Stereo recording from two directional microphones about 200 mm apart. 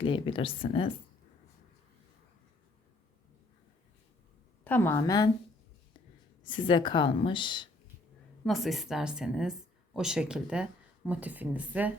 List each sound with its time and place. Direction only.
0.1 s a woman's voice: 25° left (ahead or behind)
4.6 s a woman's voice: 10° left (ahead or behind)
6.5 s a woman's voice: 25° left (ahead or behind)
8.4 s speech: centre (ahead or behind)